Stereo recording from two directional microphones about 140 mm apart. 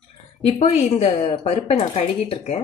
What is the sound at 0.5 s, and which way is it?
Speech, 50° left (ahead or behind).